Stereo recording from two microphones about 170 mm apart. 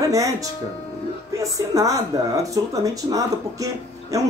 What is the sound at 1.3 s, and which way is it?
Speech, 20° right (ahead or behind).